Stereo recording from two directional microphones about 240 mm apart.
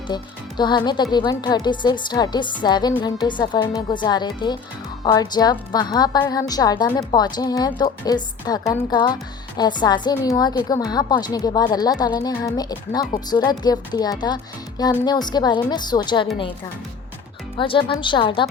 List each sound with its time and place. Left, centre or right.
0.1 s a woman's voice: centre
17.6 s a woman's voice: left